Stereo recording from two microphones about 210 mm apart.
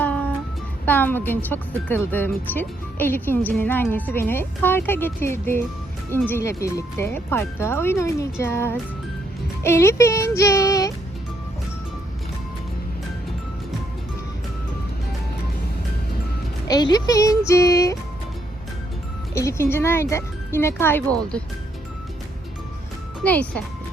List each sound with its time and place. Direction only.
0.0 s music: 5° left (ahead or behind)
0.9 s speech: 10° left (ahead or behind)
16.6 s speech: 20° left (ahead or behind)
19.3 s speech: 15° left (ahead or behind)
23.2 s speech: 5° left (ahead or behind)